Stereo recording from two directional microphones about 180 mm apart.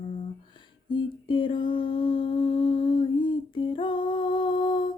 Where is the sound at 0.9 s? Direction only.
25° left (ahead or behind).